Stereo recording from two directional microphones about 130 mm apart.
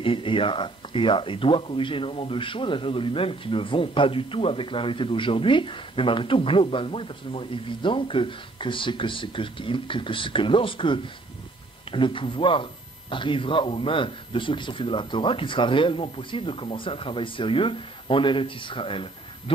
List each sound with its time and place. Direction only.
0.0 s speech: 40° left (ahead or behind)